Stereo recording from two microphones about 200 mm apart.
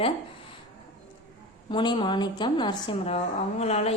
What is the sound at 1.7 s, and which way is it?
A woman's voice, 25° left (ahead or behind).